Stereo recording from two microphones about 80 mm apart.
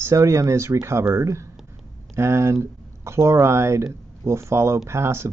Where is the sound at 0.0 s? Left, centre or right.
Right.